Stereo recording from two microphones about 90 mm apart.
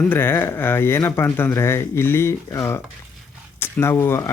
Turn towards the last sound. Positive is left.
turn(degrees=30)  # may be behind; listen again after turning